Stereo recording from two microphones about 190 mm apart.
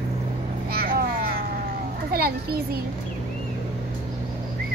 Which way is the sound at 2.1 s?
55° right (ahead or behind).